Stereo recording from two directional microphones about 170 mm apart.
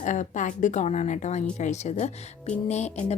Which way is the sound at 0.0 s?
45° left (ahead or behind).